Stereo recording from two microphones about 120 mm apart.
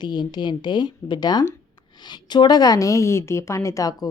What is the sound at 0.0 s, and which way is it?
A woman's voice, 40° left (ahead or behind).